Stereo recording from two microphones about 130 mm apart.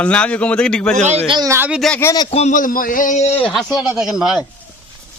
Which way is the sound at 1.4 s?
20° right (ahead or behind).